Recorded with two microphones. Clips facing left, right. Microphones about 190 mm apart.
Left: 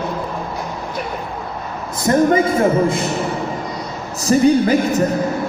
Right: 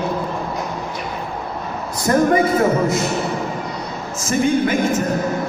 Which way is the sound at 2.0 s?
25° left (ahead or behind).